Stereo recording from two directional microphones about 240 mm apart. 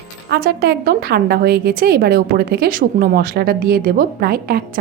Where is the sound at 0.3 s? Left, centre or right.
Right.